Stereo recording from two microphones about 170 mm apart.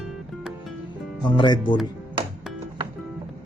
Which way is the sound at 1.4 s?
25° left (ahead or behind).